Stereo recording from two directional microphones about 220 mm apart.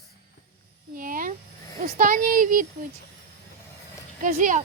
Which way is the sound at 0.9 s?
40° right (ahead or behind).